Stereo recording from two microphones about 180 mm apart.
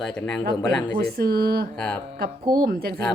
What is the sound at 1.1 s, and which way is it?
Speech, 60° right (ahead or behind).